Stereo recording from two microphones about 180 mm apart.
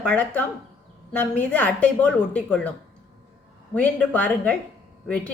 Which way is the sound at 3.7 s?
10° left (ahead or behind).